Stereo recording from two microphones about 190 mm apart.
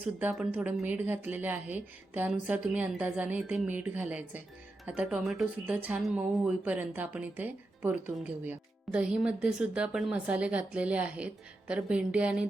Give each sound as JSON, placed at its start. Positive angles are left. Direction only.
{"t": 0.0, "sound": "speech", "side_deg": -10}